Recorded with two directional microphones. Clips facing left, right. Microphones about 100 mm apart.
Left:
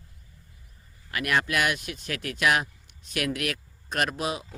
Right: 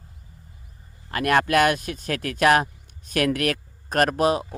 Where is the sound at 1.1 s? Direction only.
45° right (ahead or behind).